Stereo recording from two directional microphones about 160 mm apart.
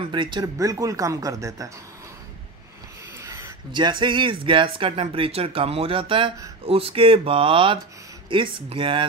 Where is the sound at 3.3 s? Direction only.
25° right (ahead or behind).